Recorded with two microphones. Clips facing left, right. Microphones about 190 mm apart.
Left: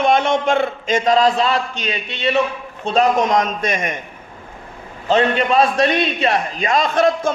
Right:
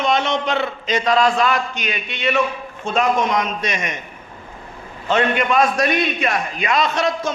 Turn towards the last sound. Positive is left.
turn(degrees=50)  # may be behind; listen again after turning